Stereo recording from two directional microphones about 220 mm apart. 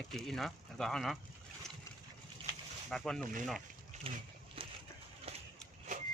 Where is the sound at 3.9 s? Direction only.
35° right (ahead or behind).